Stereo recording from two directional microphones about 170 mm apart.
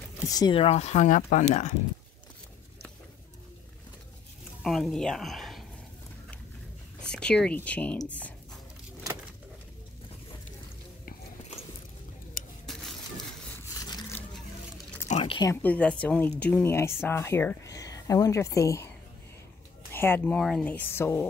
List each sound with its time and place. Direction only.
0.3 s speech: 25° left (ahead or behind); by 1.7 s 45° left (ahead or behind)
4.6 s speech: centre (ahead or behind)
7.0 s speech: 5° left (ahead or behind)
12.7 s crushing: centre (ahead or behind)
13.7 s a sound: 25° left (ahead or behind)
15.0 s a sound: 45° left (ahead or behind)
15.3 s speech: 20° left (ahead or behind)
15.6 s speech: 5° left (ahead or behind)
19.9 s speech: 15° left (ahead or behind)